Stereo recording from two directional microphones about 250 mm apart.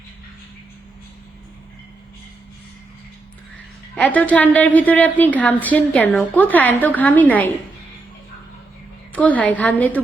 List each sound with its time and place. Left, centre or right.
3.9 s a woman's voice: centre
9.1 s a woman's voice: centre